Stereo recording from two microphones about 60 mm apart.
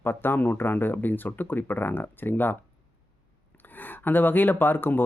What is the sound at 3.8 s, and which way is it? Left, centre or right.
Speech, left.